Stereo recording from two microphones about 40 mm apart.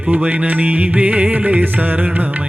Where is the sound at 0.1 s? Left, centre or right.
Right.